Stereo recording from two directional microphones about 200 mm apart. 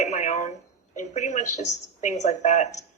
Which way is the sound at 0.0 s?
35° left (ahead or behind).